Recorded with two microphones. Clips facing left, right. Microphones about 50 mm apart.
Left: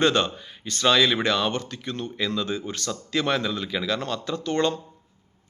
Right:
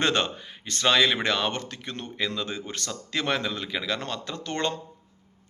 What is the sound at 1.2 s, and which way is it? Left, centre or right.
A man's voice, right.